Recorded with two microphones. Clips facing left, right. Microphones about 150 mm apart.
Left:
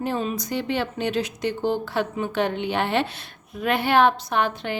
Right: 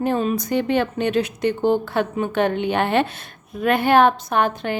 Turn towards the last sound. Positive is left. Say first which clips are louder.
# right 3 dB
turn(degrees=-45)  # may be behind; listen again after turning